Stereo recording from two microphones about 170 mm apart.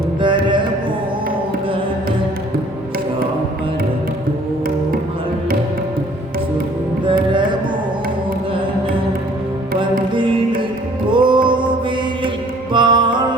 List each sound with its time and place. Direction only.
0.2 s music: 30° right (ahead or behind)
11.1 s music: 25° right (ahead or behind)
12.7 s music: 25° right (ahead or behind)